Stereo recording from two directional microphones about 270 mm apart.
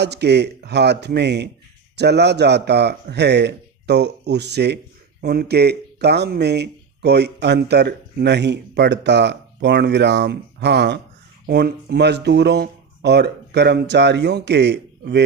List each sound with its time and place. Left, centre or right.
0.0 s speech: right